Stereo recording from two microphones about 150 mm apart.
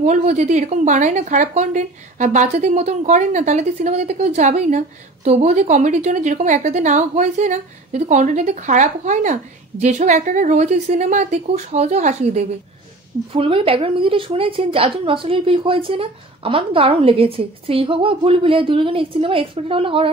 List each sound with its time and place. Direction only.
0.0 s a woman's voice: 50° right (ahead or behind)
13.3 s a woman's voice: 35° right (ahead or behind)